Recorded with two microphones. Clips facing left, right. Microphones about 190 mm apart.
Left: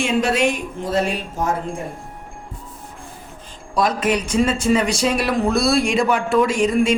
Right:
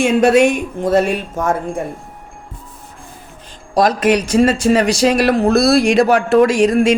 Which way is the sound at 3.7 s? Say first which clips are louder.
Right 6 dB; 85° right.